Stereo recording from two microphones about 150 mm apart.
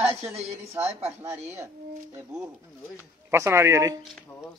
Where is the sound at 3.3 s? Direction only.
20° right (ahead or behind).